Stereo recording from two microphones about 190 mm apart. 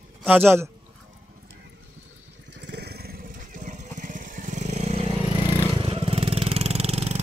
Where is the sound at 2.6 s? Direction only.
60° right (ahead or behind).